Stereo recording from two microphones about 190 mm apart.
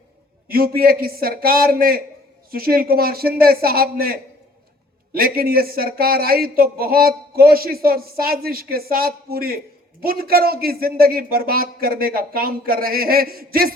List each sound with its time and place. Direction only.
0.4 s speech: 50° right (ahead or behind)